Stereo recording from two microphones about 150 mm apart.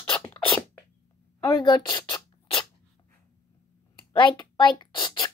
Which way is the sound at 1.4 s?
25° left (ahead or behind).